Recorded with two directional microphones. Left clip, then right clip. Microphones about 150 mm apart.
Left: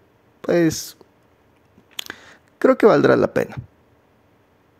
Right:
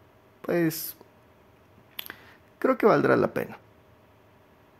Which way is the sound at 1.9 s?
30° left (ahead or behind).